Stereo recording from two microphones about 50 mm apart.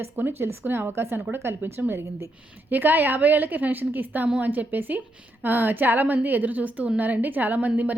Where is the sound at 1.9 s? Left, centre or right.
Right.